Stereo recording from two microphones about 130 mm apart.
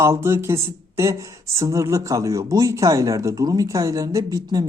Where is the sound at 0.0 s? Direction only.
20° right (ahead or behind).